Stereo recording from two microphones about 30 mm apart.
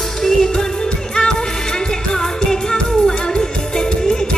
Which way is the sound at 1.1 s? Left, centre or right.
Left.